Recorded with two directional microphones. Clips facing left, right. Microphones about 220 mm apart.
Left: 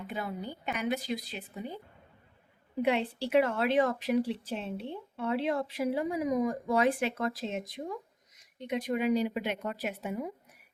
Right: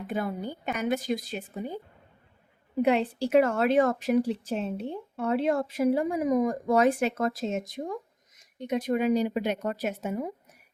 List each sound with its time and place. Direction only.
0.1 s speech: 45° right (ahead or behind)
2.8 s speech: 45° right (ahead or behind)